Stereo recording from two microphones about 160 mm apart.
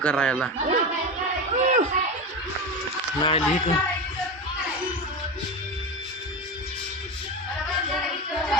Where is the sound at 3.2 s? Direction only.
30° left (ahead or behind).